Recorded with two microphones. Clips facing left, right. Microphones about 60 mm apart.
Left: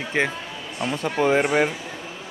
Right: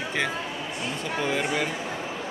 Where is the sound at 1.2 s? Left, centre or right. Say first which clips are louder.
Left 8 dB; left.